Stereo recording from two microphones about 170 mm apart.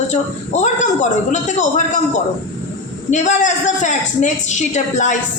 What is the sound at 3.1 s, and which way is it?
Speech, 45° left (ahead or behind).